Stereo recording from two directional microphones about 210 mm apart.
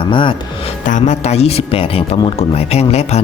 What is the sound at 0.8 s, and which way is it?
Speech, 35° left (ahead or behind).